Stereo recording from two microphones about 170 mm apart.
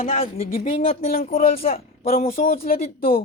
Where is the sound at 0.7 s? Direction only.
40° left (ahead or behind).